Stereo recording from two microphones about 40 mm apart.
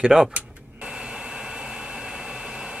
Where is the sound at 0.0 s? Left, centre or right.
Centre.